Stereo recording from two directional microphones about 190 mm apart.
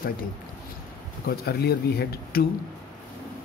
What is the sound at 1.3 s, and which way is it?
Speech, 55° left (ahead or behind).